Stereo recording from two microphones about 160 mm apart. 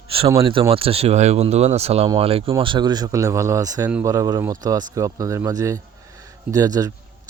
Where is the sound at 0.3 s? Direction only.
35° right (ahead or behind).